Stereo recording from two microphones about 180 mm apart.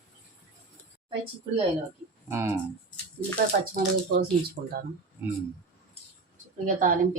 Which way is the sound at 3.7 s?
60° right (ahead or behind).